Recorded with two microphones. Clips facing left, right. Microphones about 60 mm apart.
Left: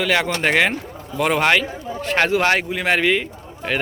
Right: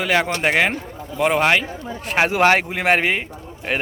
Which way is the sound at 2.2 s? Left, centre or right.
Right.